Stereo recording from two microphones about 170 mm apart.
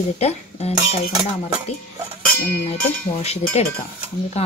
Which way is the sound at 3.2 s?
40° left (ahead or behind).